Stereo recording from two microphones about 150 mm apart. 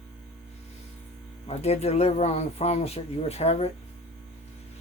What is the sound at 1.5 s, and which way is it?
Speech, 45° left (ahead or behind).